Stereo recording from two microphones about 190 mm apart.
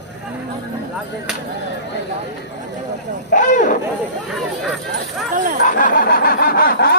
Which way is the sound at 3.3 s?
40° left (ahead or behind).